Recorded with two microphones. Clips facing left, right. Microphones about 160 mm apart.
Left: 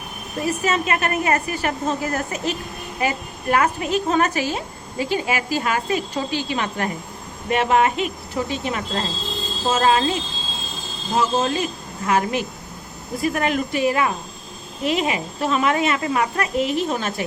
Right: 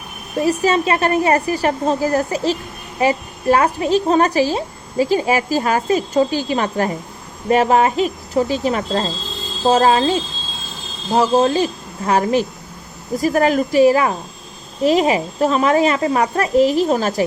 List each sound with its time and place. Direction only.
0.4 s a woman's voice: 35° right (ahead or behind)